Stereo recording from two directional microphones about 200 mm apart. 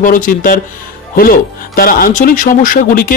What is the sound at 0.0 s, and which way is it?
Speech, 40° left (ahead or behind).